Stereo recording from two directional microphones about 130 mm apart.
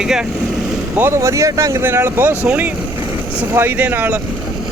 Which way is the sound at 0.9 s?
20° right (ahead or behind).